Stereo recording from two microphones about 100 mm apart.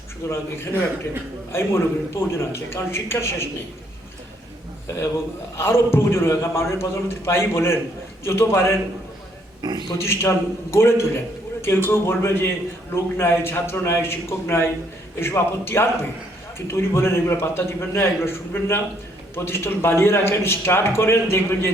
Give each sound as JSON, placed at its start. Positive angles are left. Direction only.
{"t": 0.3, "sound": "a man's voice", "side_deg": 25}
{"t": 5.5, "sound": "a man's voice", "side_deg": 25}
{"t": 10.0, "sound": "a man's voice", "side_deg": 25}